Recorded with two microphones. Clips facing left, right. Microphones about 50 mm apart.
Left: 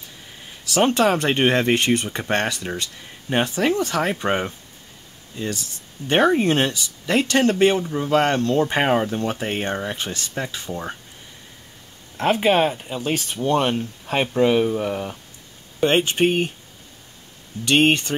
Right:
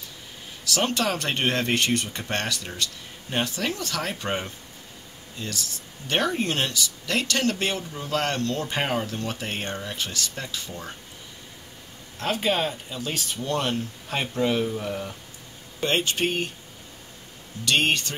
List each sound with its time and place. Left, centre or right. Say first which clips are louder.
0.7 s speech: left 8 dB; left
12.2 s speech: left 7 dB; left
17.6 s speech: left 5 dB; left